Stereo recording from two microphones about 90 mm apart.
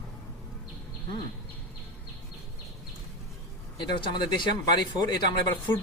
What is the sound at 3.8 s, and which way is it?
Speech, 55° left (ahead or behind).